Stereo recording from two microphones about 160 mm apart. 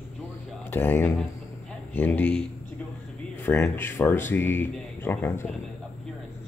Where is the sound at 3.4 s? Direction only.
15° left (ahead or behind).